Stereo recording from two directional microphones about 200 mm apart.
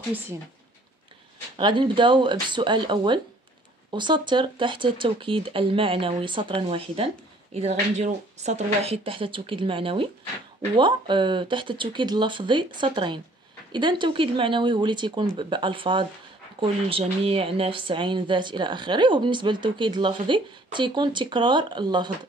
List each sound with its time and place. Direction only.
1.6 s speech: 25° right (ahead or behind)